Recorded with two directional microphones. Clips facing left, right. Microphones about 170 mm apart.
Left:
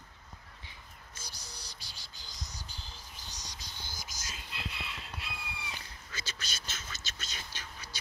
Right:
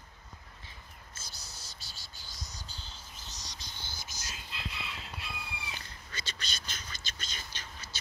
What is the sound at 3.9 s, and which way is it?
Whispering, 90° left.